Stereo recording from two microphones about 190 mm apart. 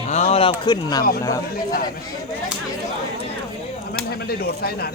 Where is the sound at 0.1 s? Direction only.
35° left (ahead or behind).